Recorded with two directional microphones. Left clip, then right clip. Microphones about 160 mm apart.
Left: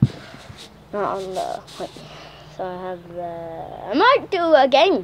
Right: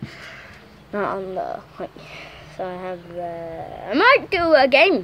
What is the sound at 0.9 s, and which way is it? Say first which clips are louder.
Speech: left 1 dB; 25° right (ahead or behind).